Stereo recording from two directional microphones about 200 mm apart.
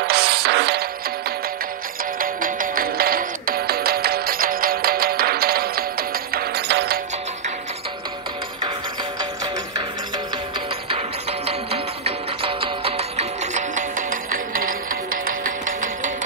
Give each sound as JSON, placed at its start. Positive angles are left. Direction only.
{"t": 0.0, "sound": "music", "side_deg": -50}
{"t": 2.1, "sound": "music", "side_deg": -45}
{"t": 11.4, "sound": "music", "side_deg": -30}